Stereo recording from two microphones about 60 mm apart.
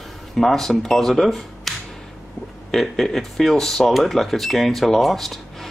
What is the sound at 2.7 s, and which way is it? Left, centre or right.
Speech, centre.